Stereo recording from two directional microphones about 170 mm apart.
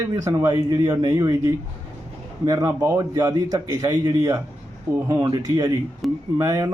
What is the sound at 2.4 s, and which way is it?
A man's voice, 20° right (ahead or behind).